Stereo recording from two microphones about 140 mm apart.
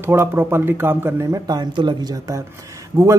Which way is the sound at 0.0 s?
15° right (ahead or behind).